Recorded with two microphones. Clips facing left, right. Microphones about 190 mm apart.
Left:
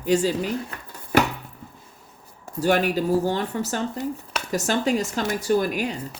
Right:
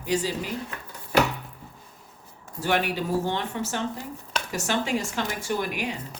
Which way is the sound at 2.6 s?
40° left (ahead or behind).